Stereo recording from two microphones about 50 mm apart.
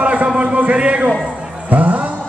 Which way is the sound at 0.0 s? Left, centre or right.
Right.